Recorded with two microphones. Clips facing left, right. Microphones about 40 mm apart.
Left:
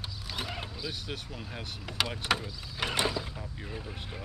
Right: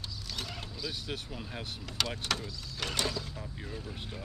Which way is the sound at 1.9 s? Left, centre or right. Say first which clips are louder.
Left 4 dB; centre.